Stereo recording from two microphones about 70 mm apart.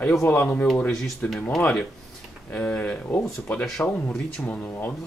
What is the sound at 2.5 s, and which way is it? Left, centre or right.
Speech, left.